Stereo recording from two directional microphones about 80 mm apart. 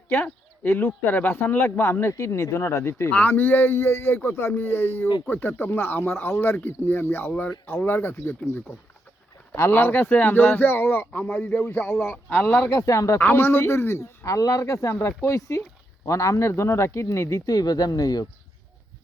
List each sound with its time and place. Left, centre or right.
0.1 s speech: left
3.1 s speech: centre
9.7 s speech: left
11.6 s speech: left
12.6 s speech: left
13.1 s speech: left